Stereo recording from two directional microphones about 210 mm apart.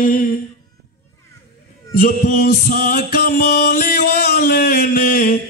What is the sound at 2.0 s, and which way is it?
Music, 40° left (ahead or behind).